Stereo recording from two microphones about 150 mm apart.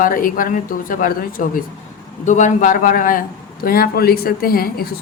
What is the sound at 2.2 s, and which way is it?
A man's voice, 55° left (ahead or behind).